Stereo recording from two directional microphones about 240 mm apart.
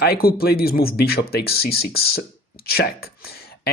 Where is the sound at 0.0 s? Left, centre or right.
Left.